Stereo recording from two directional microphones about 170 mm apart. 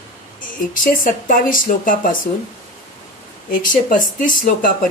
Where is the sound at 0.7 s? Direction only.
50° left (ahead or behind).